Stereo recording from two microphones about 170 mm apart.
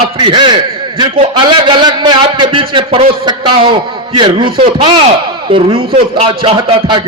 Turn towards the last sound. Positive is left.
turn(degrees=-30)  # may be behind; listen again after turning